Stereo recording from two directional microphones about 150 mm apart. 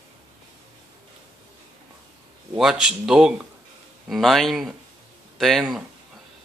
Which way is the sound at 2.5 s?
5° right (ahead or behind).